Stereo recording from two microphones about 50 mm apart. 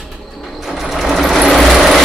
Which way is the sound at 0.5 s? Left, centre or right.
Centre.